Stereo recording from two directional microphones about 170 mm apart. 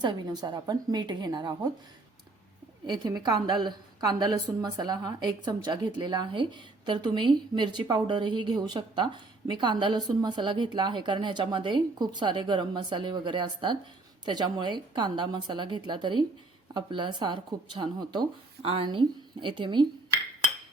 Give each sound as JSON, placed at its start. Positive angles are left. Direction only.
{"t": 0.0, "sound": "a woman's voice", "side_deg": -25}
{"t": 2.8, "sound": "a woman's voice", "side_deg": -25}